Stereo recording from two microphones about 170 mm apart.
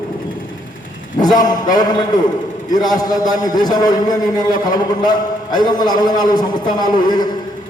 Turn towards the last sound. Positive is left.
turn(degrees=25)  # may be behind; listen again after turning